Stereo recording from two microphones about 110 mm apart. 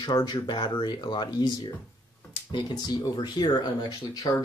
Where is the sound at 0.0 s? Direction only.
40° left (ahead or behind).